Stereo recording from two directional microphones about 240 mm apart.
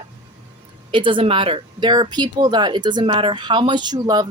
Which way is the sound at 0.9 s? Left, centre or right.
Right.